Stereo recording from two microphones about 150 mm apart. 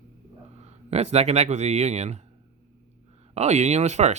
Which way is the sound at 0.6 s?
45° right (ahead or behind).